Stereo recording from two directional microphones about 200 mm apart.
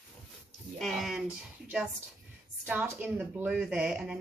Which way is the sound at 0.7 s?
Centre (ahead or behind).